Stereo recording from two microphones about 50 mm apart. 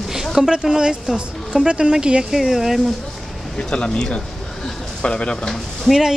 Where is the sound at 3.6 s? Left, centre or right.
Centre.